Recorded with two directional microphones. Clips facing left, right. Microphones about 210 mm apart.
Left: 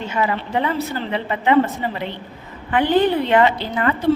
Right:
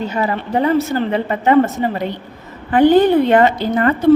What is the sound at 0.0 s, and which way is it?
A woman's voice, 40° right (ahead or behind).